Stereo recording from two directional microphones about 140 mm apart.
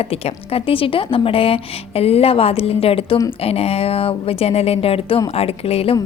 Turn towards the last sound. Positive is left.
turn(degrees=45)  # may be behind; listen again after turning